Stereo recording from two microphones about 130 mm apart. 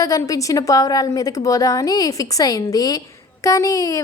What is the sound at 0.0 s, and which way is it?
A woman's voice, 25° left (ahead or behind).